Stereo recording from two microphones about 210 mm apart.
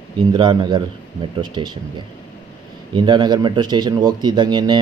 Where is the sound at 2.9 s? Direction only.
20° right (ahead or behind).